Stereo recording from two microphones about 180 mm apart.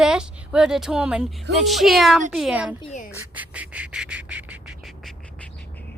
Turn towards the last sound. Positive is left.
turn(degrees=-5)  # may be behind; listen again after turning